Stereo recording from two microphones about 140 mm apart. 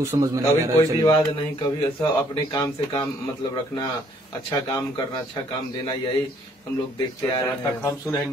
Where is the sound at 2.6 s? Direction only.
30° left (ahead or behind).